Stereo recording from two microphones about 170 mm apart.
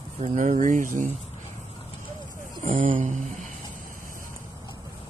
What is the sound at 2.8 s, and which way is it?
Speech, 50° right (ahead or behind).